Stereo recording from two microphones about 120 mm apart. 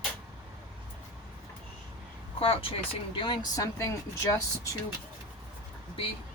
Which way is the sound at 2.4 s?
50° left (ahead or behind).